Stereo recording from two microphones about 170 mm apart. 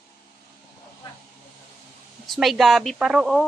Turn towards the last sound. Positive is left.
turn(degrees=0)  # may be behind; listen again after turning